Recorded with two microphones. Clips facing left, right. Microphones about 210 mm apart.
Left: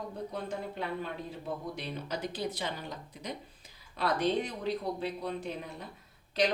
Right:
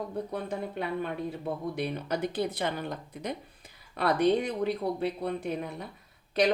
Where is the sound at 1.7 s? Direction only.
55° right (ahead or behind).